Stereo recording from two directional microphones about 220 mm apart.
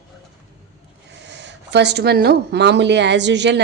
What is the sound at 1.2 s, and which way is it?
Speech, 50° right (ahead or behind).